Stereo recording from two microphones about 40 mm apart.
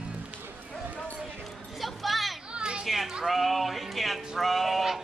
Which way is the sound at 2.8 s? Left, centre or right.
Centre.